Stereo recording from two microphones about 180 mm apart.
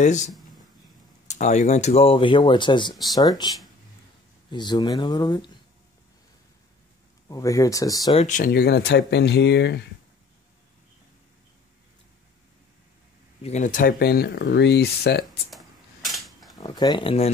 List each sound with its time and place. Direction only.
1.3 s speech: 40° left (ahead or behind); by 5.6 s 25° left (ahead or behind)
7.2 s speech: 20° left (ahead or behind)
8.3 s speech: 55° left (ahead or behind); by 9.8 s 70° left (ahead or behind)
13.4 s speech: 40° left (ahead or behind); by 15.2 s 70° left (ahead or behind)
15.2 s a sound: centre (ahead or behind)
16.5 s speech: 25° left (ahead or behind)